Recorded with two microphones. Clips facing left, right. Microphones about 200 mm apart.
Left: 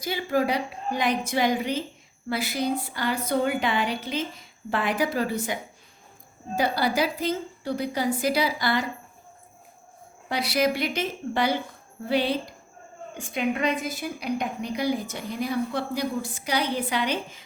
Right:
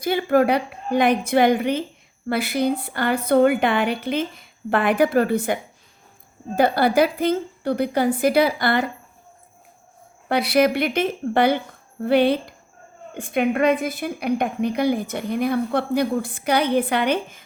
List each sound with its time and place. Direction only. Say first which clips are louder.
0.0 s a woman's voice: right 7 dB; 55° right (ahead or behind)
6.6 s a woman's voice: right 7 dB; 55° right (ahead or behind)
10.2 s a woman's voice: right 6 dB; 60° right (ahead or behind)